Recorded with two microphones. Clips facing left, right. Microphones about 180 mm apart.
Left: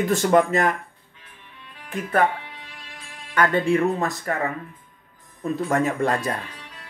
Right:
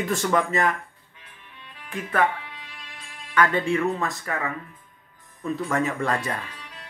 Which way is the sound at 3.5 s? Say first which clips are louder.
Left 3 dB; 40° left (ahead or behind).